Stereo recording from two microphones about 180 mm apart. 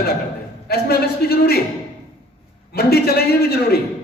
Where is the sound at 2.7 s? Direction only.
60° left (ahead or behind).